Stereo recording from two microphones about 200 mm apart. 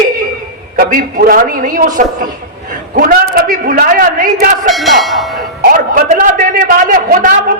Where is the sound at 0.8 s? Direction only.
45° right (ahead or behind).